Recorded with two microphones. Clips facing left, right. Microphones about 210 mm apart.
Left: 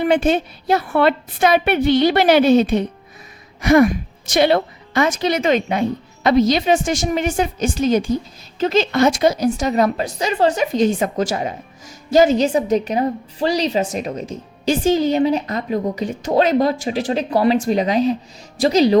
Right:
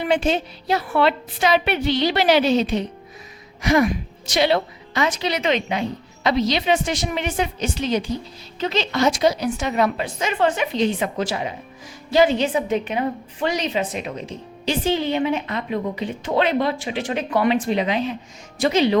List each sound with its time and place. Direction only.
0.0 s a woman's voice: 50° left (ahead or behind)